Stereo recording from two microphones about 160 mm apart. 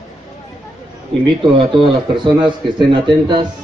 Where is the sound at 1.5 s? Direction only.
30° right (ahead or behind).